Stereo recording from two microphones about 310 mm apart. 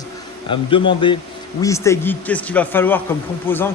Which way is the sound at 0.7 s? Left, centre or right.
Centre.